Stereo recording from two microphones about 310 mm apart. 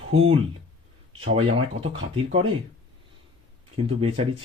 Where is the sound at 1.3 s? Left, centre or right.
Centre.